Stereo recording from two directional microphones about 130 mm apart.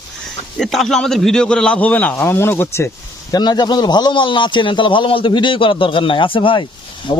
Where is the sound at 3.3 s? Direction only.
30° left (ahead or behind).